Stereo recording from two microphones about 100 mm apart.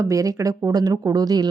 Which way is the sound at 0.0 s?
35° right (ahead or behind).